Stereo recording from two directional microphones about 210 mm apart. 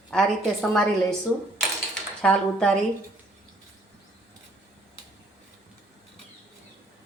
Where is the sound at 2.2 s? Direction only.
5° left (ahead or behind).